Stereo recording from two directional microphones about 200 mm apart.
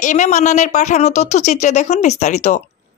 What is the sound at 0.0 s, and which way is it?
A woman's voice, 35° left (ahead or behind).